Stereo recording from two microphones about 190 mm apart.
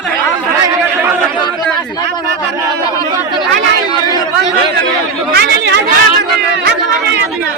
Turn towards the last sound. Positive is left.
turn(degrees=-55)  # may be behind; listen again after turning